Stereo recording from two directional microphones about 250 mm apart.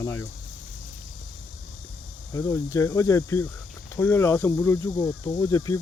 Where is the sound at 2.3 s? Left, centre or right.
Centre.